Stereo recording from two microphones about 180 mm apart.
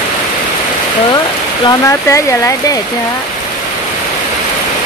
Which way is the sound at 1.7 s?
15° left (ahead or behind).